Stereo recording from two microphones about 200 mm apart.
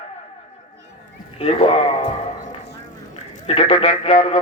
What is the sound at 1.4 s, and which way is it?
Speech, 30° left (ahead or behind).